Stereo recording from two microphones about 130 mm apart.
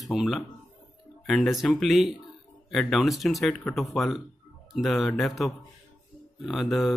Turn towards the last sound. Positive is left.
turn(degrees=0)  # may be behind; listen again after turning